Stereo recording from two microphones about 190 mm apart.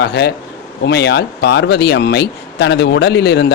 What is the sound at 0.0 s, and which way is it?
Speech, 60° left (ahead or behind).